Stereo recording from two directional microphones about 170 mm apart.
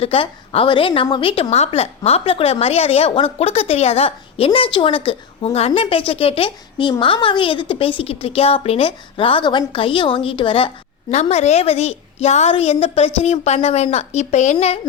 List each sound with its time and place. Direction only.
0.0 s a woman's voice: 35° left (ahead or behind)